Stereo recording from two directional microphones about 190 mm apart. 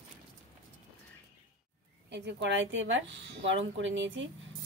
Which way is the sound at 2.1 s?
65° right (ahead or behind).